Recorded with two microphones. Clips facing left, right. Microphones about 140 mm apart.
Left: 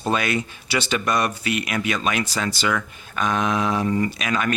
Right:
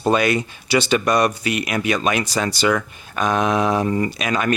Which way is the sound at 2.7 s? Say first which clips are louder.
Right 4 dB; 40° right (ahead or behind).